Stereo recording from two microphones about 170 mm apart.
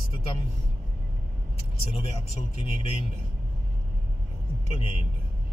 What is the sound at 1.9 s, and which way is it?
Speech, 30° left (ahead or behind).